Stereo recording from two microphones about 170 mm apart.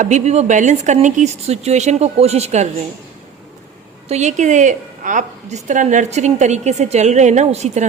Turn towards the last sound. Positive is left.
turn(degrees=-40)  # may be behind; listen again after turning